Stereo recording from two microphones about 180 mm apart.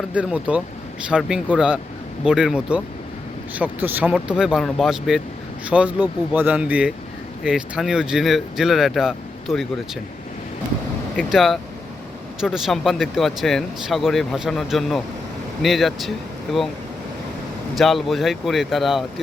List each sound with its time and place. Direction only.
0.1 s speech: 5° right (ahead or behind)
11.3 s speech: centre (ahead or behind)
17.7 s speech: centre (ahead or behind)